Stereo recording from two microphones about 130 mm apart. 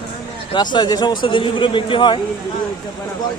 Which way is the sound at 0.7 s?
35° left (ahead or behind).